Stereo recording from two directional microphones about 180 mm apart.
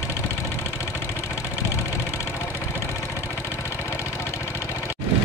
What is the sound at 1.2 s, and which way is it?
Vehicle, 15° left (ahead or behind).